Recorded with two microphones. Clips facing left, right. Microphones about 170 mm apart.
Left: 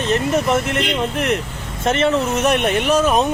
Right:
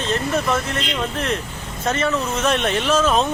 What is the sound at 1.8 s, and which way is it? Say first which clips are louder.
Speech: left 4 dB; 25° left (ahead or behind).